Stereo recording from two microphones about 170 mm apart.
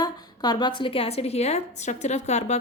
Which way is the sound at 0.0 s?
25° left (ahead or behind).